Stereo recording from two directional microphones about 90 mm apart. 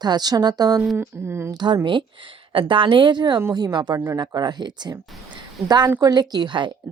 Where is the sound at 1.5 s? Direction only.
55° right (ahead or behind).